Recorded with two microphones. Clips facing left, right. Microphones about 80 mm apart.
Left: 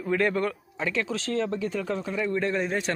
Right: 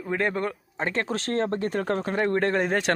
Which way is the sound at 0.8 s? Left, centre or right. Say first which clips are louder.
Right 2 dB; right.